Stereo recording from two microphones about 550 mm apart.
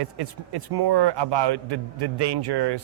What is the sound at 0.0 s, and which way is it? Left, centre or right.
A man's voice, right.